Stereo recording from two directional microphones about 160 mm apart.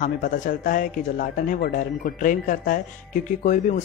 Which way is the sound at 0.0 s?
55° left (ahead or behind).